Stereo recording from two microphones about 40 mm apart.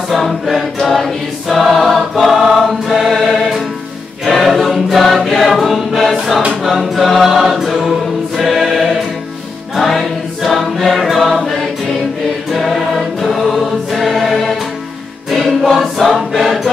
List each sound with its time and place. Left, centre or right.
0.1 s choir: centre
14.3 s music: centre
15.6 s choir: centre